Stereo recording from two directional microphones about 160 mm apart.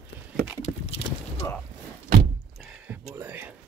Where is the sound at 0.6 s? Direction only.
45° left (ahead or behind).